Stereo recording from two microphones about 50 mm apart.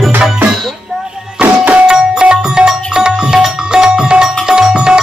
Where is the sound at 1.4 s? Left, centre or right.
Right.